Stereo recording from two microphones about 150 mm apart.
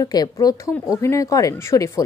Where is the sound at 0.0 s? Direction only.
25° left (ahead or behind).